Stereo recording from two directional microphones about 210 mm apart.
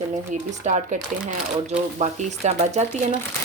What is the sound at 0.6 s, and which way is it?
Speech, 35° right (ahead or behind).